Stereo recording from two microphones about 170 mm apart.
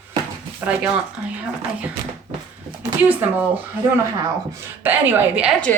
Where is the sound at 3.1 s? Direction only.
10° right (ahead or behind).